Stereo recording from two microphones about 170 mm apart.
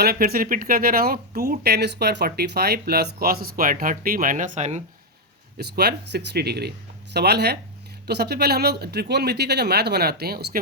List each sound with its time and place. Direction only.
0.0 s speech: 65° right (ahead or behind); by 4.8 s 45° right (ahead or behind)
5.5 s speech: 70° right (ahead or behind)